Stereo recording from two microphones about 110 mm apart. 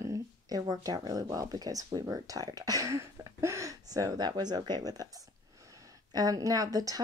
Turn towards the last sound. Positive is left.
turn(degrees=-35)  # may be behind; listen again after turning